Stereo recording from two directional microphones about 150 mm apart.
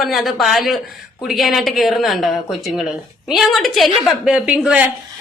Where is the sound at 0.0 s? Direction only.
Centre (ahead or behind).